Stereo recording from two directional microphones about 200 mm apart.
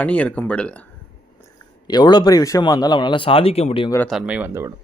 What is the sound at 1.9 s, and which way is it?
Speech, 20° left (ahead or behind).